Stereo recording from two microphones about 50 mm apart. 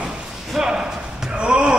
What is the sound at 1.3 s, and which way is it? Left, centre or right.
Basketball bounce, centre.